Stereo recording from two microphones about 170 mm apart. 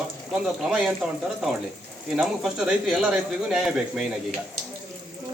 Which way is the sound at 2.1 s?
Centre (ahead or behind).